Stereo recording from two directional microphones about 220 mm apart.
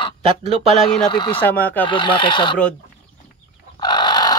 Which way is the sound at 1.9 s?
20° left (ahead or behind).